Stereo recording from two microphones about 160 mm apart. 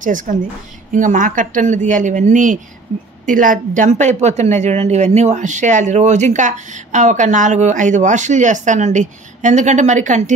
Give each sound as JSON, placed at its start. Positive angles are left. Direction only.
{"t": 0.0, "sound": "a woman's voice", "side_deg": -55}